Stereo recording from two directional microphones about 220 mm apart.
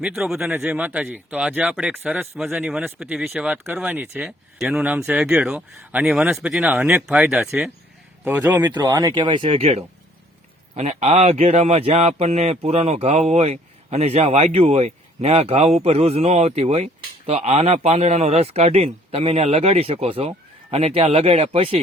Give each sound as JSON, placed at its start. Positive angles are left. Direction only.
{"t": 0.0, "sound": "a man's voice", "side_deg": -5}